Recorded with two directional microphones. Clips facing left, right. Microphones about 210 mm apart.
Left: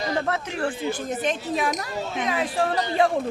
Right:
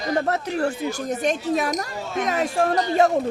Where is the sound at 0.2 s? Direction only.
40° right (ahead or behind).